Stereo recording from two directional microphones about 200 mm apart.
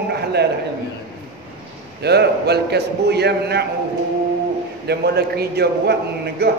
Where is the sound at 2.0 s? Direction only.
55° right (ahead or behind).